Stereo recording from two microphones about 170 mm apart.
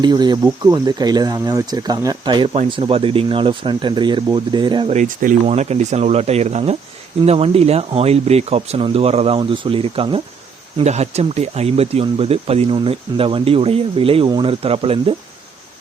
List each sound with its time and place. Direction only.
0.0 s speech: 25° right (ahead or behind)
4.9 s speech: 45° right (ahead or behind)